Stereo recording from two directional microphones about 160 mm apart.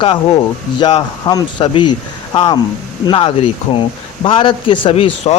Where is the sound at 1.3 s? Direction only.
25° left (ahead or behind).